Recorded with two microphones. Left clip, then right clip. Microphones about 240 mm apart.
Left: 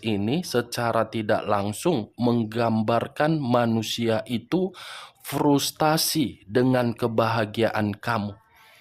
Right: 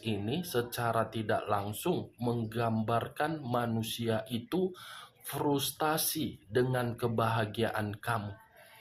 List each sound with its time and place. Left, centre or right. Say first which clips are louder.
0.0 s speech: left 9 dB; left